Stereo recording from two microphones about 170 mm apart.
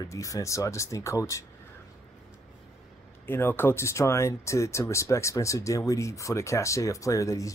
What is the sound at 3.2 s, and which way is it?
Speech, 15° left (ahead or behind).